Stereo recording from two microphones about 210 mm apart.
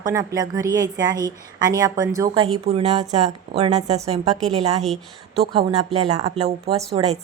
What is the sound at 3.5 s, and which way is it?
Speech, 30° right (ahead or behind).